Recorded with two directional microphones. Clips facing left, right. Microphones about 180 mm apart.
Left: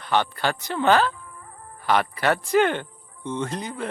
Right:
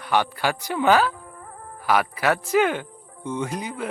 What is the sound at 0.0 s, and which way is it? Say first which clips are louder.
Speech: right 1 dB; 10° right (ahead or behind).